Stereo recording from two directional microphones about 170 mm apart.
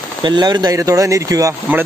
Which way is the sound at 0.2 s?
25° right (ahead or behind).